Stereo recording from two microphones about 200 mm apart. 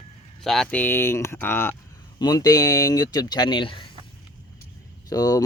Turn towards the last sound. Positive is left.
turn(degrees=20)  # may be behind; listen again after turning